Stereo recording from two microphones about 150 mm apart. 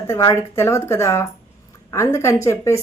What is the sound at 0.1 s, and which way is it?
A woman's voice, 20° left (ahead or behind).